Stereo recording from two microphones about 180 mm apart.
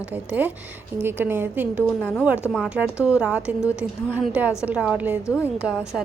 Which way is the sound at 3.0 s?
5° right (ahead or behind).